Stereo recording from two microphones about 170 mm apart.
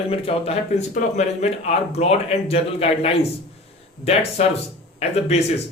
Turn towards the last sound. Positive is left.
turn(degrees=40)  # may be behind; listen again after turning